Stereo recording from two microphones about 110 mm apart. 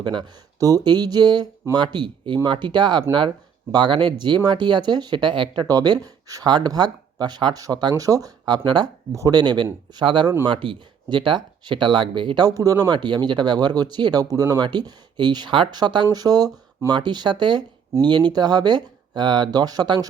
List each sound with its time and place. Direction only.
0.0 s speech: 45° right (ahead or behind)
0.6 s speech: 35° right (ahead or behind)
12.5 s speech: 35° right (ahead or behind)